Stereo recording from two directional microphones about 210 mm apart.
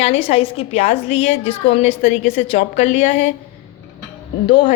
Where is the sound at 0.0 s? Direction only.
30° left (ahead or behind).